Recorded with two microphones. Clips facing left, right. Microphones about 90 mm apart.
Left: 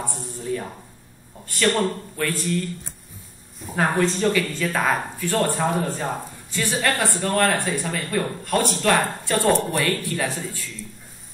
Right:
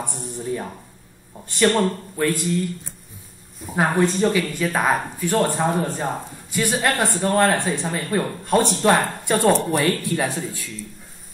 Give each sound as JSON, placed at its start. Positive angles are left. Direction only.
{"t": 0.2, "sound": "speech", "side_deg": -20}
{"t": 3.7, "sound": "speech", "side_deg": -15}